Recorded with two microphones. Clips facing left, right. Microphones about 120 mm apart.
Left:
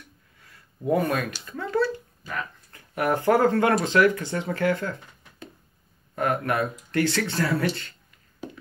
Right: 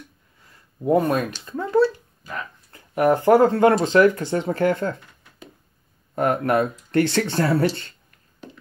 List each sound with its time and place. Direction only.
0.5 s a sound: 25° right (ahead or behind)
1.4 s speech: 25° right (ahead or behind)
6.1 s speech: 30° right (ahead or behind)